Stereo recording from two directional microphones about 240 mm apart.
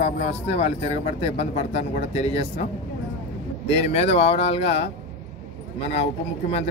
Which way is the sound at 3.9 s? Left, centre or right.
Left.